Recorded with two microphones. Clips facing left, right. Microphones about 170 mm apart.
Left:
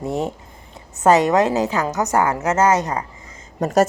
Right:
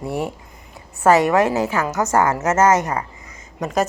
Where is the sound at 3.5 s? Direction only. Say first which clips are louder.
Left 4 dB; 40° left (ahead or behind).